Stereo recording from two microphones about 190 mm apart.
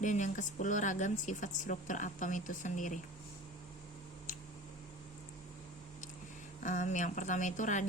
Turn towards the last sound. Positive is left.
turn(degrees=40)  # may be behind; listen again after turning